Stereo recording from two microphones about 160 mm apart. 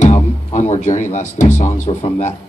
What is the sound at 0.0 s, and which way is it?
Speech, 45° left (ahead or behind).